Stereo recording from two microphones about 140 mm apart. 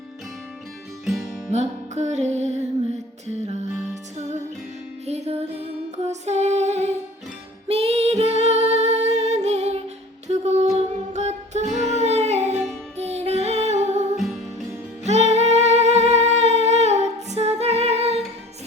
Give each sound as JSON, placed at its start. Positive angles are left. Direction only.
{"t": 1.0, "sound": "music", "side_deg": 0}
{"t": 1.5, "sound": "music", "side_deg": -55}
{"t": 5.0, "sound": "music", "side_deg": -50}
{"t": 7.7, "sound": "female singing", "side_deg": -45}
{"t": 10.2, "sound": "music", "side_deg": -55}